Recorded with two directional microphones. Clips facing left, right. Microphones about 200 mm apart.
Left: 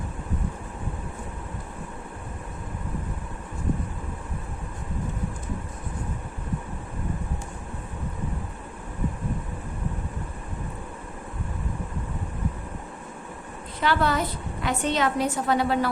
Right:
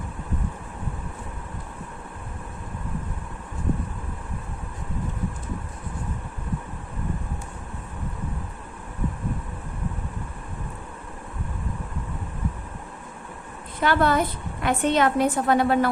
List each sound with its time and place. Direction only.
13.8 s a woman's voice: 50° right (ahead or behind)